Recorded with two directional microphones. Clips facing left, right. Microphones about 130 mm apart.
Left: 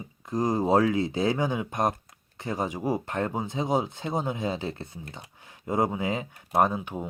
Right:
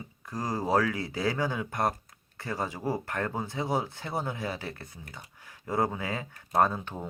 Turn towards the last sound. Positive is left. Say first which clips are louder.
# left 2 dB
turn(degrees=15)  # may be behind; listen again after turning